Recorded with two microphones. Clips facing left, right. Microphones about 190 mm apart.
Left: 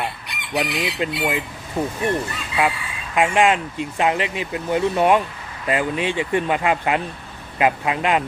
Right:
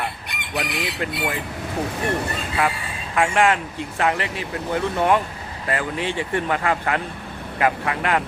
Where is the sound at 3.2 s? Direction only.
20° left (ahead or behind).